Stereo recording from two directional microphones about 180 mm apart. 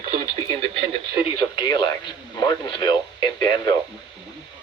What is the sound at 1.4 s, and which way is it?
Radio, 25° left (ahead or behind).